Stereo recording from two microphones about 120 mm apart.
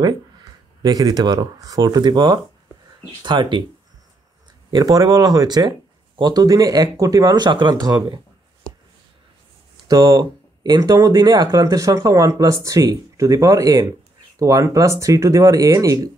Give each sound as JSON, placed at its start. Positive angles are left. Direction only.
{"t": 0.8, "sound": "speech", "side_deg": -35}
{"t": 4.6, "sound": "speech", "side_deg": -35}
{"t": 9.8, "sound": "speech", "side_deg": -30}